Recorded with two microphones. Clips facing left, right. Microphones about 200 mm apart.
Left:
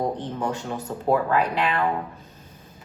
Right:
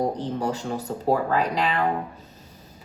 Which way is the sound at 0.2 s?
40° right (ahead or behind).